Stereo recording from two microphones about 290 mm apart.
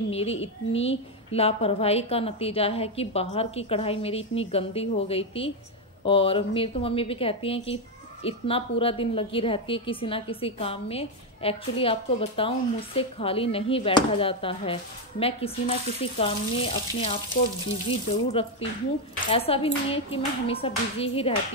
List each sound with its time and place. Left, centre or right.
0.1 s a woman's voice: left